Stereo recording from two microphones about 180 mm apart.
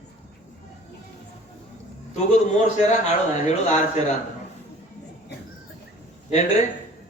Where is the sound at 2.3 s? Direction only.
40° left (ahead or behind).